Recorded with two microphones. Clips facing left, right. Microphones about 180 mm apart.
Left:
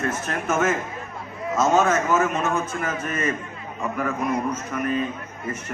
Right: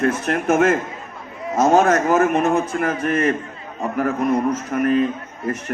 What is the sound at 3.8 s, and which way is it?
Speech, 40° right (ahead or behind).